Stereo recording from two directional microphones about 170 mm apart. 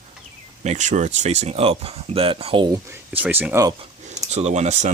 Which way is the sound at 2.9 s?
10° right (ahead or behind).